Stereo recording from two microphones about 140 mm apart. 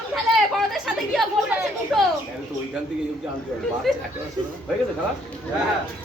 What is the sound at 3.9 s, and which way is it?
Speech, centre (ahead or behind).